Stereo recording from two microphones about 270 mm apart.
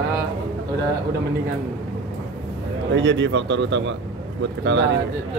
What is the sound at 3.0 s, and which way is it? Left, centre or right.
Speech, right.